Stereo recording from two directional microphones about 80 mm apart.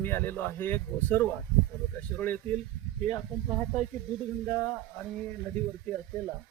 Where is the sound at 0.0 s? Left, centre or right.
Left.